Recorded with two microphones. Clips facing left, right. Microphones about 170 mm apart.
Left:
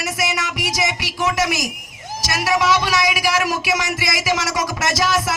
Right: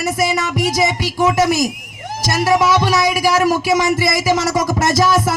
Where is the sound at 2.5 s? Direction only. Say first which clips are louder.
Right 4 dB; 50° right (ahead or behind).